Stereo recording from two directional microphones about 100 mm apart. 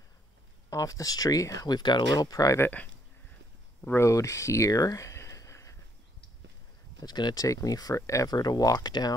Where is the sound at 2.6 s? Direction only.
15° left (ahead or behind); by 5.8 s 30° left (ahead or behind).